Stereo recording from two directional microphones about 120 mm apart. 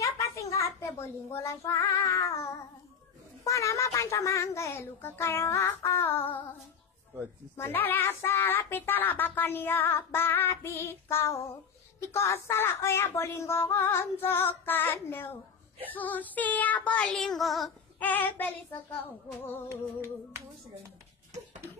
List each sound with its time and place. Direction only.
0.0 s a child's voice: 25° left (ahead or behind)
3.4 s speech: 25° left (ahead or behind)
7.5 s speech: 15° left (ahead or behind)
15.9 s child singing: 15° left (ahead or behind)
17.9 s child singing: 15° left (ahead or behind)
19.7 s humming: 25° right (ahead or behind)